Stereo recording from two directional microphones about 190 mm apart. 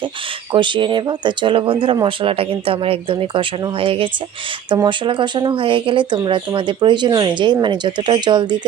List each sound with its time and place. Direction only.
0.5 s speech: 25° right (ahead or behind)